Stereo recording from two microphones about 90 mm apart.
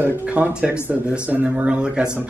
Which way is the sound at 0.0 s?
20° right (ahead or behind).